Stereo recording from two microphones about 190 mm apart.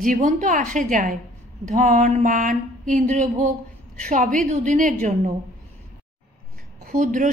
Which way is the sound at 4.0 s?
45° right (ahead or behind).